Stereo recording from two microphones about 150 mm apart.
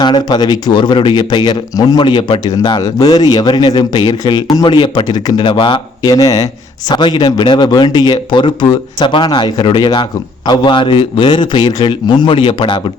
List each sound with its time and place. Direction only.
0.0 s speech: 30° left (ahead or behind)